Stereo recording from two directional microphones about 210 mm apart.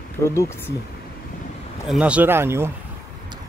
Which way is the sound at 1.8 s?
5° right (ahead or behind).